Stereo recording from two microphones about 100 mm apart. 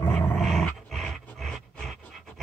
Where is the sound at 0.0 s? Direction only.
20° left (ahead or behind).